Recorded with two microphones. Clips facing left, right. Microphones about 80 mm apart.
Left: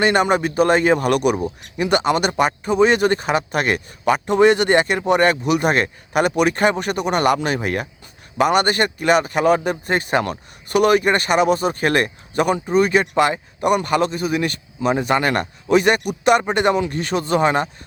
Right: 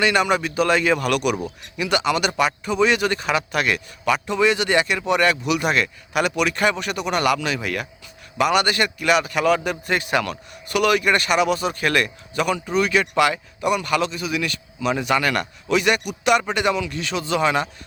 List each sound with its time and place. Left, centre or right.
0.0 s a man's voice: left